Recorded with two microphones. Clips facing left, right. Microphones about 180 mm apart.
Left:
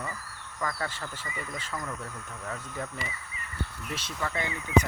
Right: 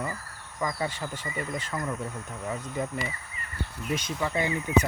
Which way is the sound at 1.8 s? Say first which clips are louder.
Right 5 dB; 20° right (ahead or behind).